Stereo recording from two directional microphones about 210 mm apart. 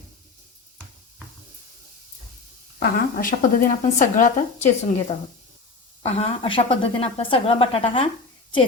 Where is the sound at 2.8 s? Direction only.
40° left (ahead or behind).